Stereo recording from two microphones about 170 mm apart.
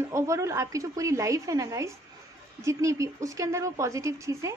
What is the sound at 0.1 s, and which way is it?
A woman's voice, 15° right (ahead or behind).